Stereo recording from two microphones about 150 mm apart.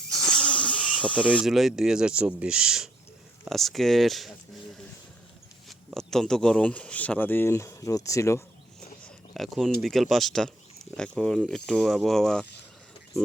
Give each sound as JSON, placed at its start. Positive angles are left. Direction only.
{"t": 0.1, "sound": "snake", "side_deg": 5}
{"t": 1.4, "sound": "speech", "side_deg": 0}
{"t": 5.6, "sound": "speech", "side_deg": 5}
{"t": 9.0, "sound": "a sound", "side_deg": 0}
{"t": 9.8, "sound": "speech", "side_deg": 0}